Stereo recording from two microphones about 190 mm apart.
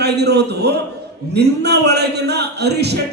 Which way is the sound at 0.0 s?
60° right (ahead or behind).